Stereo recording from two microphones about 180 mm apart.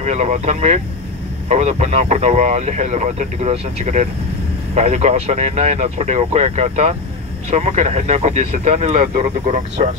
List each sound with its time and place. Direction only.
0.0 s speech: 40° right (ahead or behind)